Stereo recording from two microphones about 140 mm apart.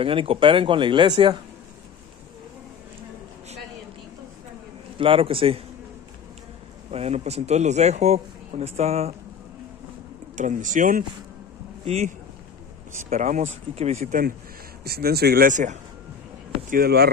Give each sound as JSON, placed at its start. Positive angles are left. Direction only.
{"t": 0.0, "sound": "speech", "side_deg": -40}
{"t": 4.9, "sound": "speech", "side_deg": -40}
{"t": 6.9, "sound": "a man's voice", "side_deg": -50}
{"t": 10.3, "sound": "speech", "side_deg": -65}
{"t": 11.8, "sound": "speech", "side_deg": -50}
{"t": 12.9, "sound": "speech", "side_deg": -60}
{"t": 13.7, "sound": "speech", "side_deg": -50}
{"t": 14.8, "sound": "speech", "side_deg": -90}
{"t": 16.7, "sound": "speech", "side_deg": -90}